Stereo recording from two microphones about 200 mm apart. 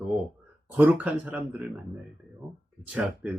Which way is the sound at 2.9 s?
5° right (ahead or behind).